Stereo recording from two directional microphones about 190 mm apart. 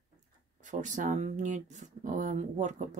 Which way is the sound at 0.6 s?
40° right (ahead or behind).